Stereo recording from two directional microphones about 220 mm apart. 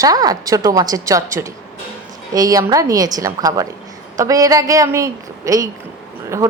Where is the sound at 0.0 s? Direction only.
15° right (ahead or behind).